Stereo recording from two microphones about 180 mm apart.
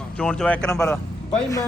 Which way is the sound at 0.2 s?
5° left (ahead or behind).